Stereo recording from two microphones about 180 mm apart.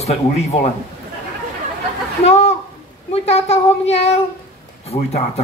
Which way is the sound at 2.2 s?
35° left (ahead or behind).